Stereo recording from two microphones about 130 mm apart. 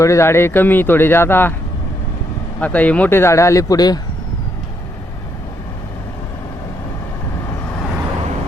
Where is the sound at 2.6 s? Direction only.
10° left (ahead or behind); by 4.0 s 30° left (ahead or behind).